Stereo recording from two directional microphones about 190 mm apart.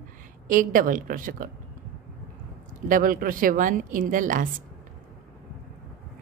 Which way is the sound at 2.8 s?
45° right (ahead or behind).